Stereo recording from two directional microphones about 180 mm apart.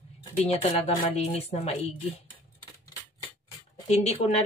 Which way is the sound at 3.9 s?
35° left (ahead or behind).